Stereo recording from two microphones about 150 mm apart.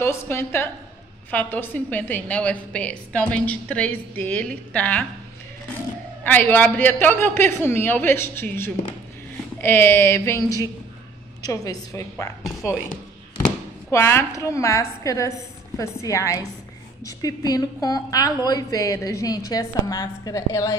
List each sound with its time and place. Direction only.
0.0 s a woman's voice: 15° left (ahead or behind)
6.2 s a woman's voice: 10° left (ahead or behind)
13.8 s a woman's voice: 15° left (ahead or behind)